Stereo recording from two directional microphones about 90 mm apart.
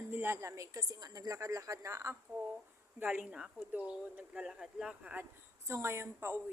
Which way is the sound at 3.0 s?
20° right (ahead or behind).